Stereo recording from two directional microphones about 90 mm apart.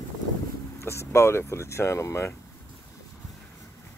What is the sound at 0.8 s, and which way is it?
Speech, 30° left (ahead or behind).